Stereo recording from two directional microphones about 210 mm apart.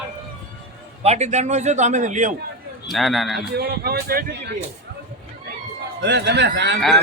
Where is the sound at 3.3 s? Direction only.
50° right (ahead or behind).